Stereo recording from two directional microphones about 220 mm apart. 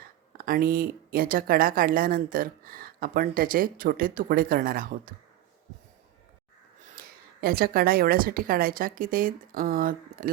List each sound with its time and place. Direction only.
0.3 s speech: 40° right (ahead or behind)
7.0 s a sound: 40° right (ahead or behind)
7.4 s speech: 40° right (ahead or behind)